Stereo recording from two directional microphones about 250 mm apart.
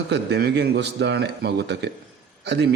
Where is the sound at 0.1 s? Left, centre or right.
Right.